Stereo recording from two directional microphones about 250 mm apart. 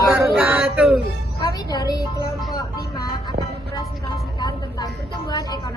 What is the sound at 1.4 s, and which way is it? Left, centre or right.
A woman's voice, centre.